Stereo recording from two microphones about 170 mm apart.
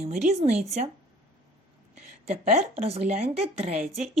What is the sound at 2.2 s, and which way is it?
A woman's voice, 40° right (ahead or behind).